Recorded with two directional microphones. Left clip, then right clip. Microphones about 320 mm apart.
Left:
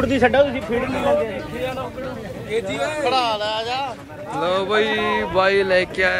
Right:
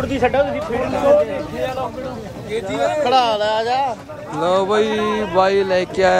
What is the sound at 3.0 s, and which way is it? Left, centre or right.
Speech, right.